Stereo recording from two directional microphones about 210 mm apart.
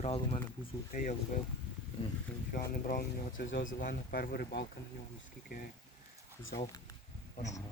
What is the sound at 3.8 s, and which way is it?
Speech, 45° left (ahead or behind).